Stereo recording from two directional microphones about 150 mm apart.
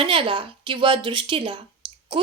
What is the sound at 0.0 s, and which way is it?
A woman's voice, 35° right (ahead or behind).